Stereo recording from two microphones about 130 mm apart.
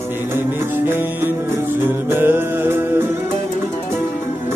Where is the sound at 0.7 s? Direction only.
15° right (ahead or behind).